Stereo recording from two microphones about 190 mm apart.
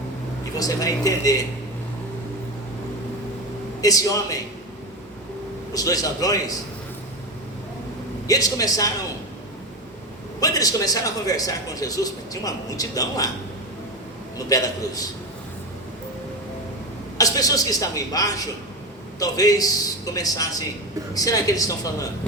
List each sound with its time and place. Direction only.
0.5 s speech: 20° left (ahead or behind)
3.8 s speech: 20° left (ahead or behind)
5.7 s a man's voice: 20° left (ahead or behind)
8.3 s a man's voice: 20° left (ahead or behind)
10.4 s a man's voice: 20° left (ahead or behind)
14.3 s a man's voice: 20° left (ahead or behind)
17.2 s a man's voice: 20° left (ahead or behind)